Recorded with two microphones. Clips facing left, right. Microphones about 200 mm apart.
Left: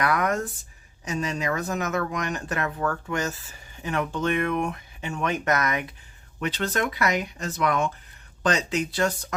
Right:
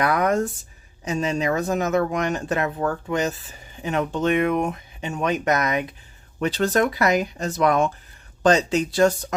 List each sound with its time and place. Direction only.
0.0 s speech: 25° right (ahead or behind)
6.4 s speech: 40° right (ahead or behind)